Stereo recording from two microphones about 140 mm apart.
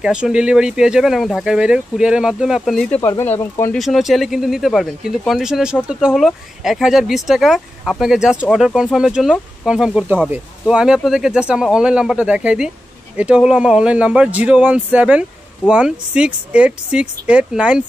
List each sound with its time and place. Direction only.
0.0 s speech: 5° right (ahead or behind)
3.0 s speech: 25° left (ahead or behind)
3.7 s speech: centre (ahead or behind)